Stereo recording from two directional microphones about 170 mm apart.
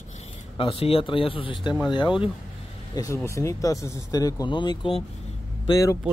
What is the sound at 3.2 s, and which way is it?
Speech, 15° left (ahead or behind).